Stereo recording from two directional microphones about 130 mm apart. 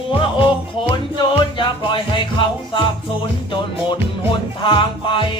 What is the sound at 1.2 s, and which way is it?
Music, 40° left (ahead or behind).